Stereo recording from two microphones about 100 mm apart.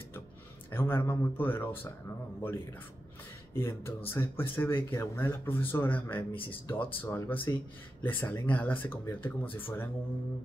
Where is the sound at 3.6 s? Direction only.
25° left (ahead or behind).